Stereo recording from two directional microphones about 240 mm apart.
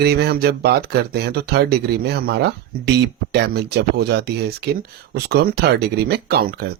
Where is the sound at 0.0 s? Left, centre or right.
Right.